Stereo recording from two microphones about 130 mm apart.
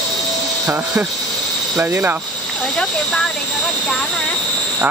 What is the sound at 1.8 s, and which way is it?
Speech, 20° right (ahead or behind).